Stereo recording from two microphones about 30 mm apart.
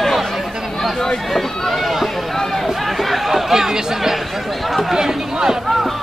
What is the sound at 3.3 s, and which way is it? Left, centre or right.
Speech, centre.